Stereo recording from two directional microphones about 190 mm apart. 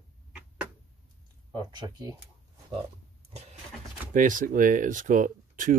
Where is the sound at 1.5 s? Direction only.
25° right (ahead or behind).